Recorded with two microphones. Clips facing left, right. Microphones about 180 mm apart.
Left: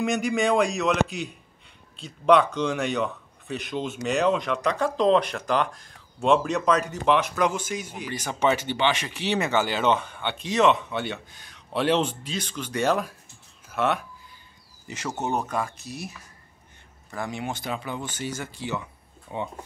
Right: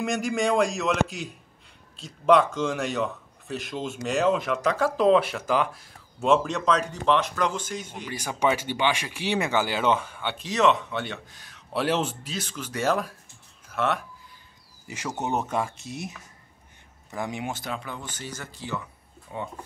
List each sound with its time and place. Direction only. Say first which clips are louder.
0.0 s a man's voice: left 2 dB; centre (ahead or behind)
8.1 s a man's voice: left 1 dB; 10° right (ahead or behind)
13.7 s a sound: left 2 dB; centre (ahead or behind)
14.9 s speech: left 1 dB; 15° right (ahead or behind)
17.1 s speech: even; 15° right (ahead or behind)
17.5 s a man's voice: left 1 dB; centre (ahead or behind)
17.8 s speech: left 4 dB; 20° left (ahead or behind)
18.1 s speech: left 6 dB; 10° left (ahead or behind)